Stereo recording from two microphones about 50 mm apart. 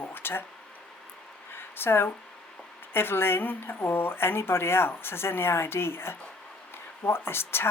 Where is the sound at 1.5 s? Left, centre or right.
Left.